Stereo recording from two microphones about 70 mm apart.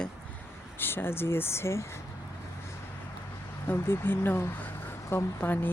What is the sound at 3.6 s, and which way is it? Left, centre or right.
Speech, left.